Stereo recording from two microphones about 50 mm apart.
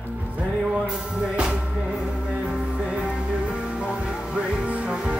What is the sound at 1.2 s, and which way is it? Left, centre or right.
Music, centre.